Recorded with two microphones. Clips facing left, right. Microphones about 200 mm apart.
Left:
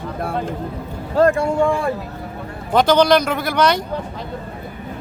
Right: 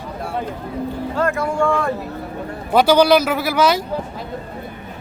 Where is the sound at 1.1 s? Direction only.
35° left (ahead or behind).